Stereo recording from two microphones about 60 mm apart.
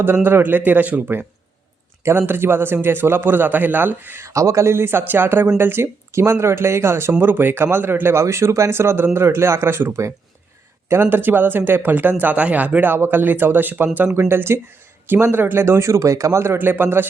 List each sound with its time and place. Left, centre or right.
0.0 s speech: right
4.2 s speech: right
8.2 s speech: right
14.1 s speech: right
15.6 s speech: right
16.6 s speech: right